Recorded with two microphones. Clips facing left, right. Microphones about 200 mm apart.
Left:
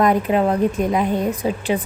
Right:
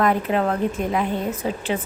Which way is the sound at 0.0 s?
15° left (ahead or behind).